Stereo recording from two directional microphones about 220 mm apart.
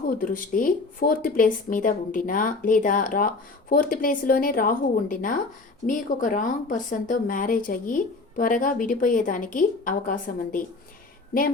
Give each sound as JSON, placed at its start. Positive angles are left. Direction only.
{"t": 0.1, "sound": "speech", "side_deg": 40}